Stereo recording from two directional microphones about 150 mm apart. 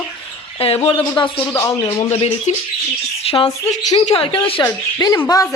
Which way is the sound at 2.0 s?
45° left (ahead or behind).